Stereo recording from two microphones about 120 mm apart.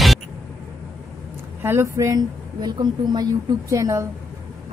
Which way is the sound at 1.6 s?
20° right (ahead or behind).